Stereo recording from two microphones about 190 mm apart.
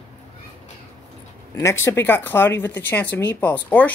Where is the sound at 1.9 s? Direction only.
10° left (ahead or behind).